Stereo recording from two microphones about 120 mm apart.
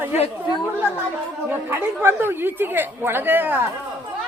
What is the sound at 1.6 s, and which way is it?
A woman's voice, 20° right (ahead or behind).